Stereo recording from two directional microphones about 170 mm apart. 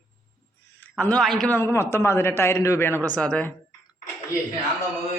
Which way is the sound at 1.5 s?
15° left (ahead or behind).